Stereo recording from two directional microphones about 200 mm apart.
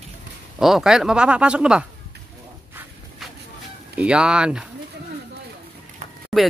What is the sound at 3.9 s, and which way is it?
Speech, 5° right (ahead or behind).